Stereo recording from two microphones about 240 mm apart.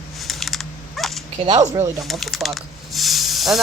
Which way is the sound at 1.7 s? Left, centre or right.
Centre.